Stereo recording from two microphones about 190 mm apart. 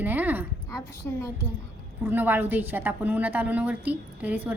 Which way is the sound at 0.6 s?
15° left (ahead or behind).